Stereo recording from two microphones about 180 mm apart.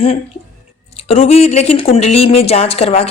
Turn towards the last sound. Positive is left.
turn(degrees=35)  # may be behind; listen again after turning